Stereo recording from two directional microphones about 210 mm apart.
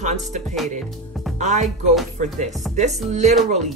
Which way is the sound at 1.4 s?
35° right (ahead or behind).